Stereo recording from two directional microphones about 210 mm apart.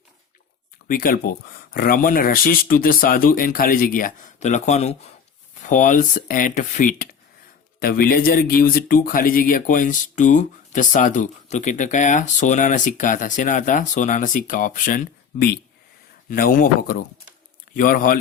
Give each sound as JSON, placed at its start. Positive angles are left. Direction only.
{"t": 0.9, "sound": "speech", "side_deg": 45}